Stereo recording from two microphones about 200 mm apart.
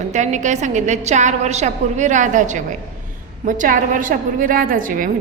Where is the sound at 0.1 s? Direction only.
35° right (ahead or behind).